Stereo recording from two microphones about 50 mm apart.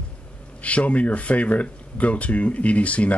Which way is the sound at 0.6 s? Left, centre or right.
Left.